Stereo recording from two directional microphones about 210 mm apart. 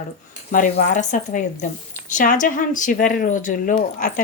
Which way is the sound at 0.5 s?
40° left (ahead or behind).